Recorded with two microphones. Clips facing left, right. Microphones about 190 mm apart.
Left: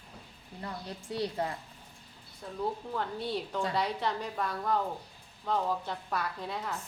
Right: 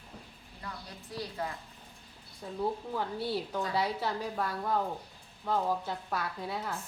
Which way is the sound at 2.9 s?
5° right (ahead or behind).